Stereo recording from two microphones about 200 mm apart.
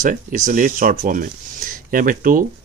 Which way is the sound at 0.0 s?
40° right (ahead or behind).